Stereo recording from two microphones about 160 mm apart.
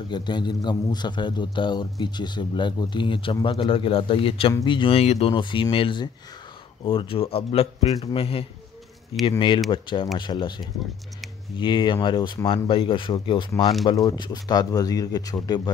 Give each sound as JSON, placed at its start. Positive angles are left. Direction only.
{"t": 0.1, "sound": "a man's voice", "side_deg": 30}
{"t": 9.7, "sound": "a man's voice", "side_deg": 30}